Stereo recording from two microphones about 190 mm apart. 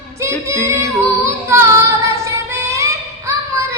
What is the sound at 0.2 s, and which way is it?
Female singing, 15° right (ahead or behind).